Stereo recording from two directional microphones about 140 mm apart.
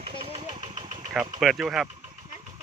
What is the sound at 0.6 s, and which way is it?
Engine, 60° right (ahead or behind).